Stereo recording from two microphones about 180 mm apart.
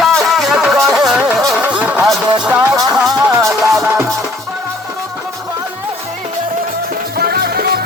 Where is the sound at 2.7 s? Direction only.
20° right (ahead or behind).